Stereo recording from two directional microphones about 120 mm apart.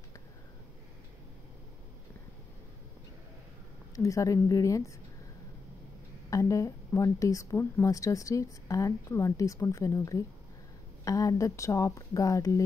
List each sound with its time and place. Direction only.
3.9 s speech: 25° left (ahead or behind)
6.3 s speech: 25° left (ahead or behind)